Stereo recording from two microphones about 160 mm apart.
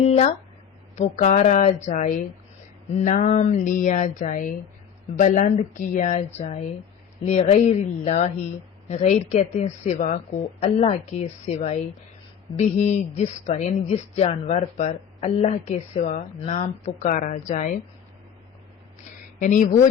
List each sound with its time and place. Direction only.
0.0 s speech: 45° left (ahead or behind)
19.4 s speech: 50° left (ahead or behind)